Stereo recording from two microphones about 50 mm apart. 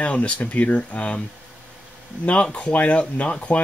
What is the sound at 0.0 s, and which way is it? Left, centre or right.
Speech, left.